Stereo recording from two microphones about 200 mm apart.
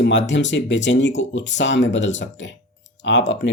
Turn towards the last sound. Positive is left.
turn(degrees=65)  # may be behind; listen again after turning